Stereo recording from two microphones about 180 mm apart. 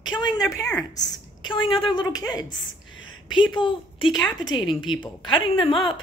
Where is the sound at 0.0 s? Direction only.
25° left (ahead or behind).